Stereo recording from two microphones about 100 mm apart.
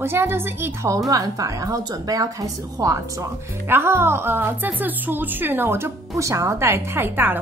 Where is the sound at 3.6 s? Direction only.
25° right (ahead or behind).